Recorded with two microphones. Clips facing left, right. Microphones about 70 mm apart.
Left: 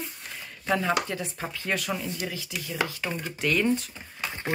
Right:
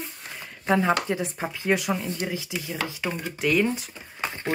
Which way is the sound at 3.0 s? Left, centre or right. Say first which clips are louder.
Right 2 dB; centre.